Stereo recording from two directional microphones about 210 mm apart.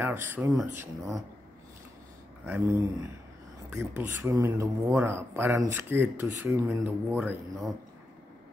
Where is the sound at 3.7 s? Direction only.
10° right (ahead or behind).